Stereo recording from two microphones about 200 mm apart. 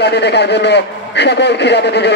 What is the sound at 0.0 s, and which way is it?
A man's voice, 55° left (ahead or behind).